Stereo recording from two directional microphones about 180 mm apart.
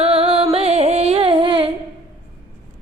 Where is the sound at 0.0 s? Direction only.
30° right (ahead or behind).